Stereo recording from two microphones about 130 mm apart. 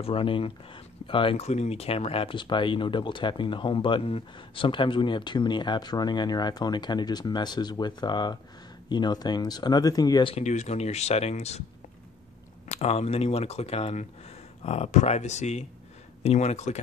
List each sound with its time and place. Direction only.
0.0 s speech: 45° left (ahead or behind)
10.3 s speech: 65° left (ahead or behind)
12.6 s speech: 50° left (ahead or behind)